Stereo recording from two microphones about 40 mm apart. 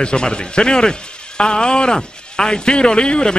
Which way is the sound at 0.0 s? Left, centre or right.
Left.